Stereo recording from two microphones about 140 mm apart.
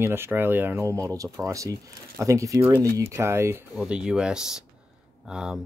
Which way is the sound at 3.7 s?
5° right (ahead or behind).